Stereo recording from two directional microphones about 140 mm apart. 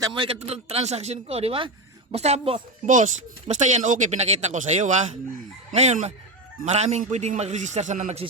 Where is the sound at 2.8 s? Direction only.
65° right (ahead or behind).